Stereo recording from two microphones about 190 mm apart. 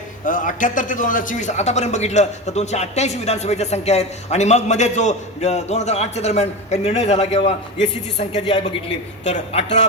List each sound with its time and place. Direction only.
0.3 s speech: 45° left (ahead or behind)